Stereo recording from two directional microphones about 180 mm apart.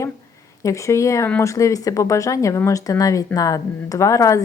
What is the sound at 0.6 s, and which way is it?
A woman's voice, 15° left (ahead or behind).